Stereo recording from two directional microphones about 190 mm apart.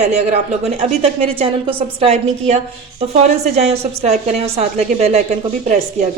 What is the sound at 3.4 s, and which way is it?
A woman's voice, 35° right (ahead or behind).